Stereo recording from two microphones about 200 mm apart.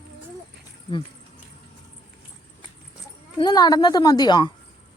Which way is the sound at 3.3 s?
20° left (ahead or behind).